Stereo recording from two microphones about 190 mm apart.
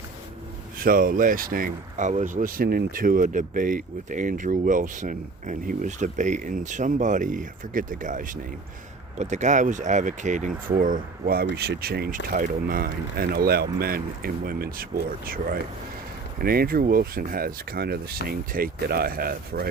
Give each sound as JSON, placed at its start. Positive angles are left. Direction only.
{"t": 0.8, "sound": "speech", "side_deg": -45}